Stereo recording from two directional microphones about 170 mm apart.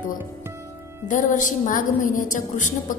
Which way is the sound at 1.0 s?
50° left (ahead or behind).